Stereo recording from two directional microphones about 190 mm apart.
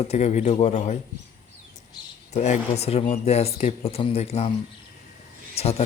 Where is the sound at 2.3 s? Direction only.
35° left (ahead or behind).